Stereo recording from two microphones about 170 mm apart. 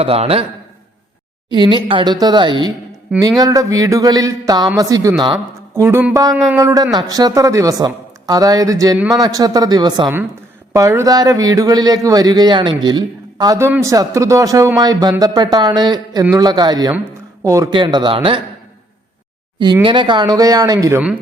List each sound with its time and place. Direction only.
0.0 s a man's voice: 35° right (ahead or behind)
1.5 s a man's voice: 25° right (ahead or behind)
19.8 s a man's voice: 30° right (ahead or behind)